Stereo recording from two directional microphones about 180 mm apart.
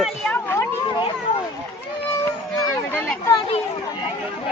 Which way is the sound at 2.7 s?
15° left (ahead or behind).